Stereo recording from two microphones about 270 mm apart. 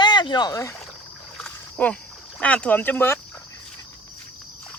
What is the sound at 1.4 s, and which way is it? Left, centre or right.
Splash, centre.